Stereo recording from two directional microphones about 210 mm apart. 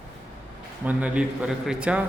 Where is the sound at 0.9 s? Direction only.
5° right (ahead or behind).